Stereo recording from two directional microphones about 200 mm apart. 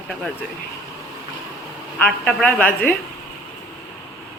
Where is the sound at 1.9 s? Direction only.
5° left (ahead or behind).